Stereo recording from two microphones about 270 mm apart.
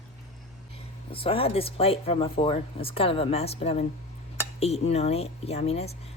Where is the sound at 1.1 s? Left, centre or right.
Centre.